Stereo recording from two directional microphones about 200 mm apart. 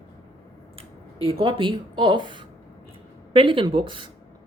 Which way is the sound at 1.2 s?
25° right (ahead or behind).